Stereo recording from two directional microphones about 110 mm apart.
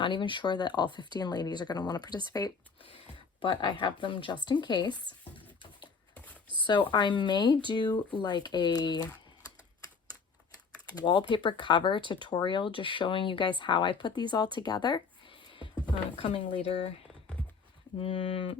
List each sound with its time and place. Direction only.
0.0 s speech: 45° left (ahead or behind)
3.4 s speech: 50° left (ahead or behind)
6.7 s speech: 45° left (ahead or behind)
11.0 s speech: 50° left (ahead or behind)
15.7 s a sound: 50° right (ahead or behind)
18.0 s speech: 55° left (ahead or behind)